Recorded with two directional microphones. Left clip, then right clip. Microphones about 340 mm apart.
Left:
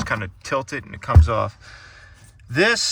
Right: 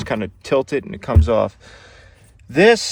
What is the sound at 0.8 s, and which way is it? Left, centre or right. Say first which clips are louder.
Speech: right 3 dB; centre.